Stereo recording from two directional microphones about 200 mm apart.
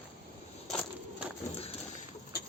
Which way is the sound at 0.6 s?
Centre (ahead or behind).